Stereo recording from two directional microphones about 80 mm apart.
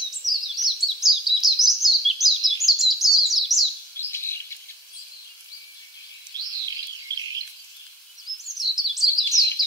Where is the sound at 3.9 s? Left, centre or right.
Left.